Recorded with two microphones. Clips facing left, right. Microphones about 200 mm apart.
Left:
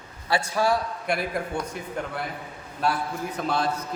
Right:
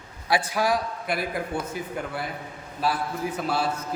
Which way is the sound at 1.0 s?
Centre (ahead or behind).